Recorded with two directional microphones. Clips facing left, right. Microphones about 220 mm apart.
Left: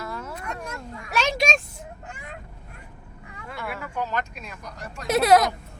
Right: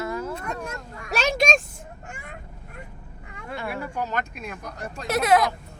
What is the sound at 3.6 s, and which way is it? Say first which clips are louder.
Speech: right 1 dB; 35° right (ahead or behind).